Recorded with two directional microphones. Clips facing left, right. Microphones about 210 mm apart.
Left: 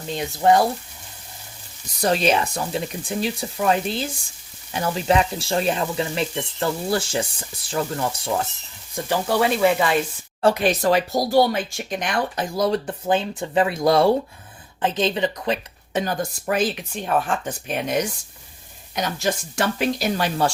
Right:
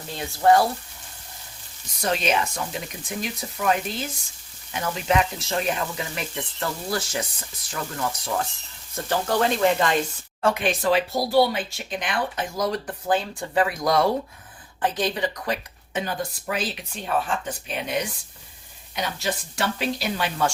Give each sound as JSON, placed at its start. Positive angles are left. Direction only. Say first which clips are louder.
{"t": 0.1, "sound": "speech", "louder": "left 1 dB", "side_deg": 20}
{"t": 2.0, "sound": "speech", "louder": "left 4 dB", "side_deg": 35}
{"t": 9.0, "sound": "speech", "louder": "left 2 dB", "side_deg": 10}
{"t": 10.4, "sound": "speech", "louder": "left 4 dB", "side_deg": 40}
{"t": 15.9, "sound": "a woman's voice", "louder": "left 4 dB", "side_deg": 40}